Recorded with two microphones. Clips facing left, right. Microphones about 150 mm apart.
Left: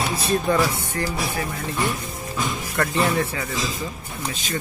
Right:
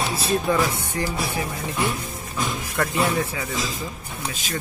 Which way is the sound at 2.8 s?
10° right (ahead or behind).